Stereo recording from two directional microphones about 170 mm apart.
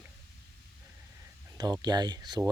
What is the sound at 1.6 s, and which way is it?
Speech, 25° right (ahead or behind).